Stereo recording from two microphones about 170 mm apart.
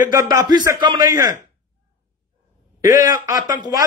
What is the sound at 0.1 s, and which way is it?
A man's voice, 20° right (ahead or behind).